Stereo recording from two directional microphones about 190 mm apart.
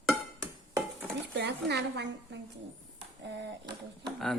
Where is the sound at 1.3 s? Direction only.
60° right (ahead or behind).